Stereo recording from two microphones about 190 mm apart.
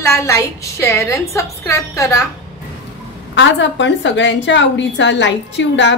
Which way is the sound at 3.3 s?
70° left (ahead or behind).